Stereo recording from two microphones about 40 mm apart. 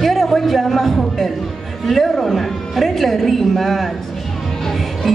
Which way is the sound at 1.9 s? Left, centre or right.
Centre.